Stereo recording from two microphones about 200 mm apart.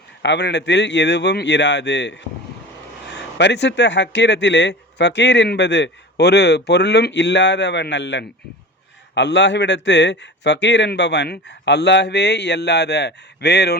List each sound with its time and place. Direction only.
0.2 s speech: 60° left (ahead or behind)